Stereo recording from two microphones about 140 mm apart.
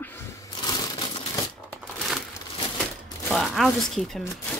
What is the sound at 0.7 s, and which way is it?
Crumpling, 30° left (ahead or behind).